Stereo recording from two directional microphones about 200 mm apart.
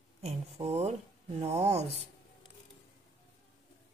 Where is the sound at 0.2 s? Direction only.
30° right (ahead or behind).